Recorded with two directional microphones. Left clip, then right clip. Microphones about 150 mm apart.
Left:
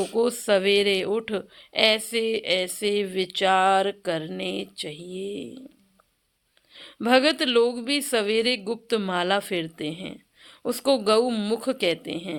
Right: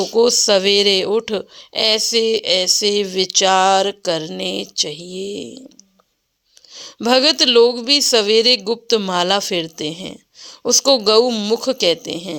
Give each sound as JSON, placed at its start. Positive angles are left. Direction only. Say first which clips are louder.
{"t": 0.0, "sound": "speech", "louder": "right 10 dB", "side_deg": -45}
{"t": 6.7, "sound": "speech", "louder": "right 5 dB", "side_deg": -45}